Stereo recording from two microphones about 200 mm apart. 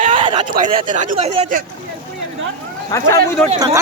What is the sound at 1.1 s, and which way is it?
Speech, 30° right (ahead or behind).